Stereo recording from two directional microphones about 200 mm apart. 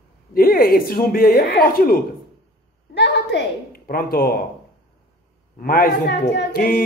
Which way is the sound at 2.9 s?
60° left (ahead or behind).